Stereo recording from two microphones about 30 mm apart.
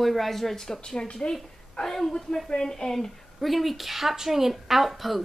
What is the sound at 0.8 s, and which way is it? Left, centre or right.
Speech, left.